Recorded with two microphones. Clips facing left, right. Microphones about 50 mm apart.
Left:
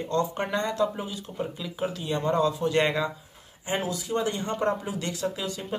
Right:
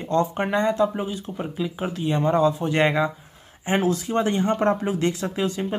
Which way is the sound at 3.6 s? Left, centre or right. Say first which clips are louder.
Right 7 dB; right.